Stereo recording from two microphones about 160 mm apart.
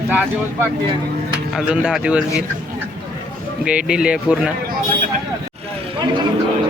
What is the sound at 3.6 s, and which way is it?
Speech, 5° right (ahead or behind).